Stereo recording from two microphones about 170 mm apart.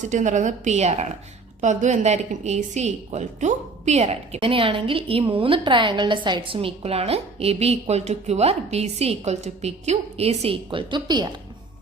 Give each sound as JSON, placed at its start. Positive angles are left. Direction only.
{"t": 0.0, "sound": "a woman's voice", "side_deg": -45}